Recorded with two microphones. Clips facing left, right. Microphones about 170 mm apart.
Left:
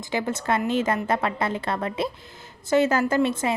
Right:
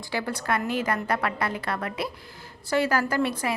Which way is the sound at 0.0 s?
20° left (ahead or behind).